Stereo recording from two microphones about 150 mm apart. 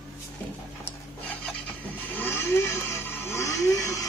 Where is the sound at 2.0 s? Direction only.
15° left (ahead or behind).